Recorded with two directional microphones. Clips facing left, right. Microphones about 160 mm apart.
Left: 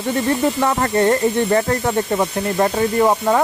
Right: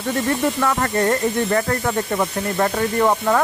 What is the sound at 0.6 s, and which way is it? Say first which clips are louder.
Speech: left 3 dB; 25° left (ahead or behind).